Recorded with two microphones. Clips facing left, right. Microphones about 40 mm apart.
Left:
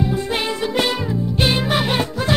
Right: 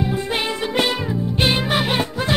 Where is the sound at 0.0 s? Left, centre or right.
Centre.